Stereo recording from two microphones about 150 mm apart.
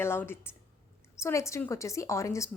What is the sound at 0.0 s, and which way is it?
A woman's voice, 15° left (ahead or behind).